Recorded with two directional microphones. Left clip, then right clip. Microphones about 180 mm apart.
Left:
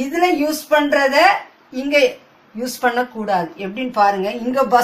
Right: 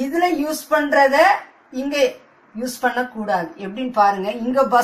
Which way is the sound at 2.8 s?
25° left (ahead or behind).